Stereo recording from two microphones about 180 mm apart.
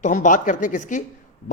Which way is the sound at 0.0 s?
45° left (ahead or behind).